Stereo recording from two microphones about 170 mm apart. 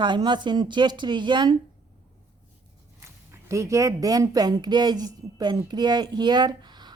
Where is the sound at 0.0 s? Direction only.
25° right (ahead or behind).